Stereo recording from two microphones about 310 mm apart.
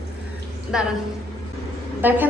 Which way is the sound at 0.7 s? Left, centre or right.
Centre.